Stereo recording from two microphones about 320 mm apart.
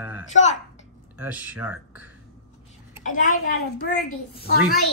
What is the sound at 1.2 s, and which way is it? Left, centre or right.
Speech, centre.